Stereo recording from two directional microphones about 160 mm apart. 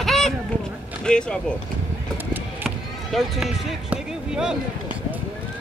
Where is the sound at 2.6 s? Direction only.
Centre (ahead or behind).